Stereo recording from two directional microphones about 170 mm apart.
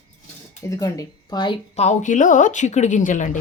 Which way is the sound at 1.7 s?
40° left (ahead or behind).